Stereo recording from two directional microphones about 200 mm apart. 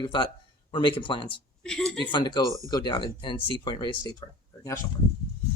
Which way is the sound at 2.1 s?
20° left (ahead or behind).